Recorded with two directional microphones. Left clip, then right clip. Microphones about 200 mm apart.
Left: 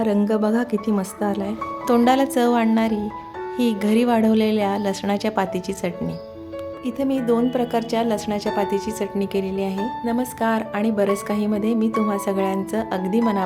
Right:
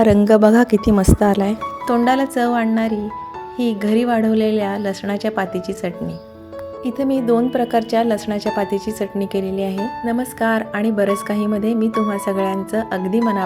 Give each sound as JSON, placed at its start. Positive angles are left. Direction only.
{"t": 0.0, "sound": "speech", "side_deg": -35}
{"t": 1.9, "sound": "a woman's voice", "side_deg": 0}
{"t": 6.8, "sound": "speech", "side_deg": -15}